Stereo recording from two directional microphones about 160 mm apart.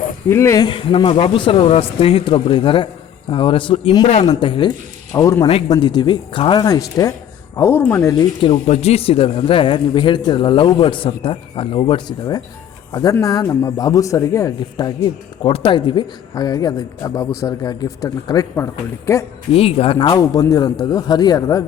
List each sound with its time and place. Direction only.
0.3 s speech: 15° left (ahead or behind); by 4.7 s 30° left (ahead or behind)
5.1 s a man's voice: 20° left (ahead or behind)
8.4 s a man's voice: 35° left (ahead or behind); by 19.2 s 15° left (ahead or behind)
19.5 s a man's voice: 40° left (ahead or behind); by 21.6 s 20° left (ahead or behind)